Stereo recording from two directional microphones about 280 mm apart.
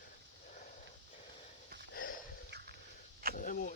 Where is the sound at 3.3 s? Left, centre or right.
Left.